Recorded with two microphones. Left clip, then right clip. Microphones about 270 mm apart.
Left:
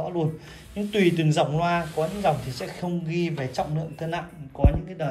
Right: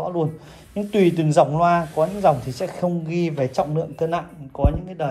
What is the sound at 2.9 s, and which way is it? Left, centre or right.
Speech, centre.